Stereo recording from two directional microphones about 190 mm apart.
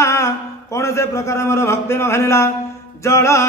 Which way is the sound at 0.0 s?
15° left (ahead or behind).